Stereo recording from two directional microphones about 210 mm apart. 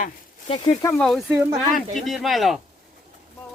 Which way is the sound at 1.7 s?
Centre (ahead or behind).